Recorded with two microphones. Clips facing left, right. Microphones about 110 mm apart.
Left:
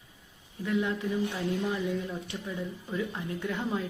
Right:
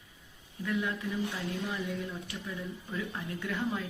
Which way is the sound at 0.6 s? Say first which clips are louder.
Left 4 dB; 25° left (ahead or behind).